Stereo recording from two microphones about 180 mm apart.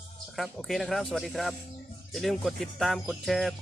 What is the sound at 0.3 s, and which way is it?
Speech, centre (ahead or behind).